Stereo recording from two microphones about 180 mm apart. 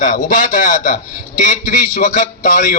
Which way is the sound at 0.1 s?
45° left (ahead or behind).